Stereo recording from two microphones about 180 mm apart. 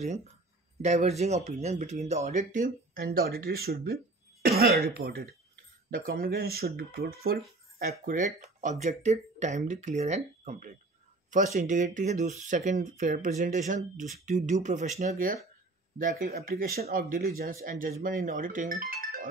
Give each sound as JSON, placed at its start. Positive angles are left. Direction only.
{"t": 0.8, "sound": "speech", "side_deg": -35}
{"t": 3.0, "sound": "speech", "side_deg": -55}